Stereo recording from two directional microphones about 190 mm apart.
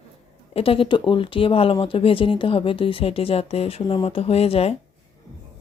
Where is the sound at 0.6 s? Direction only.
30° left (ahead or behind).